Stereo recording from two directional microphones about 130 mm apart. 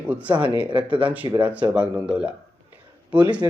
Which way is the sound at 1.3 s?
10° right (ahead or behind).